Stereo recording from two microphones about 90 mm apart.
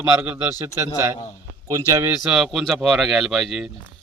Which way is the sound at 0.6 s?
30° right (ahead or behind).